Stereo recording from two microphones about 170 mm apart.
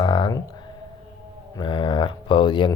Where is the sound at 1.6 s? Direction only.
30° left (ahead or behind).